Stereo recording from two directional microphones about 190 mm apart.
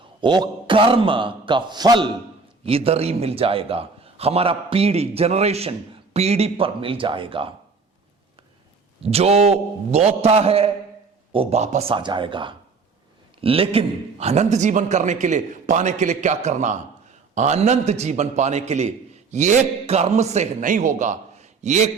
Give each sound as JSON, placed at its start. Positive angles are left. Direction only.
{"t": 0.2, "sound": "a man's voice", "side_deg": -25}
{"t": 9.0, "sound": "a man's voice", "side_deg": -35}